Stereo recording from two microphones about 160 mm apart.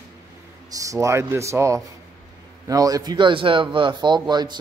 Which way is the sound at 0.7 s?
20° right (ahead or behind).